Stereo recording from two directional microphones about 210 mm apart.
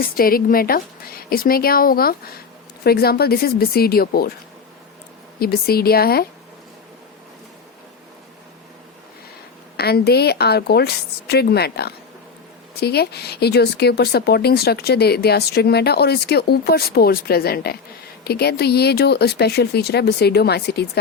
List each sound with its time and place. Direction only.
0.0 s speech: 45° left (ahead or behind)
5.4 s speech: 45° left (ahead or behind)
9.7 s speech: 50° left (ahead or behind)